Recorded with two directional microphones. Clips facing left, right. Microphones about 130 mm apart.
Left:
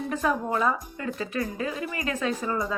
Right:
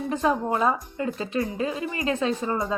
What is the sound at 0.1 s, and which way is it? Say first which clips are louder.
Speech: right 3 dB; 25° right (ahead or behind).